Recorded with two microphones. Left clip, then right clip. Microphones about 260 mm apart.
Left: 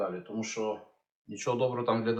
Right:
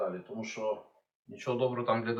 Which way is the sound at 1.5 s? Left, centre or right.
Centre.